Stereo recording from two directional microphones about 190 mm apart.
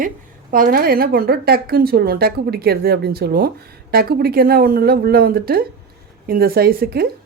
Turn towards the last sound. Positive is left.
turn(degrees=-55)  # may be behind; listen again after turning